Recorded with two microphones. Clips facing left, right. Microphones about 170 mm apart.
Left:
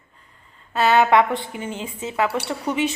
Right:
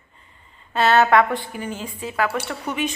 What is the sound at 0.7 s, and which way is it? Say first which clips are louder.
A woman's voice: even; 10° left (ahead or behind).